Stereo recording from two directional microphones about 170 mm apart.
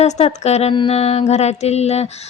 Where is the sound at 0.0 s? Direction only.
40° left (ahead or behind).